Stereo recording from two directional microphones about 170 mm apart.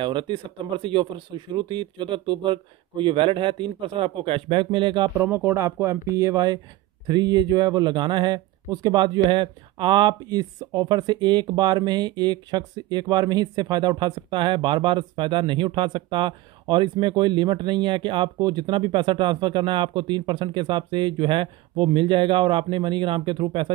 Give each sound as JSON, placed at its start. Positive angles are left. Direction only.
{"t": 0.0, "sound": "speech", "side_deg": -30}
{"t": 5.1, "sound": "speech", "side_deg": -10}